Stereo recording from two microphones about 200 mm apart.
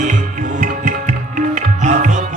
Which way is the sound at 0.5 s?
40° right (ahead or behind).